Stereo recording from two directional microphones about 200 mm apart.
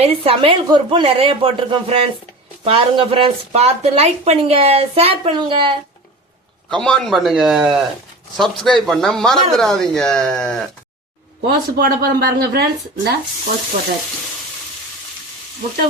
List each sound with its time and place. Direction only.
0.0 s speech: 30° right (ahead or behind)
6.7 s speech: 5° left (ahead or behind)
11.4 s speech: 45° right (ahead or behind)